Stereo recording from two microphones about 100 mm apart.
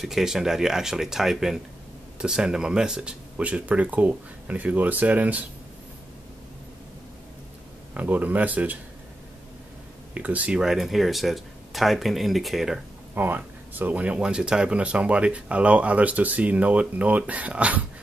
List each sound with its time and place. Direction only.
0.0 s speech: 5° right (ahead or behind)
7.9 s speech: 15° right (ahead or behind)
10.1 s speech: 15° right (ahead or behind)
13.1 s speech: 20° right (ahead or behind)